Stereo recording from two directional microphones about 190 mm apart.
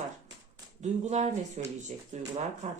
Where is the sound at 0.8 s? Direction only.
35° right (ahead or behind).